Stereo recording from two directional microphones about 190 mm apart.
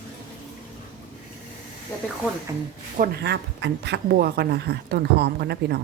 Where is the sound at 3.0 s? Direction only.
55° right (ahead or behind).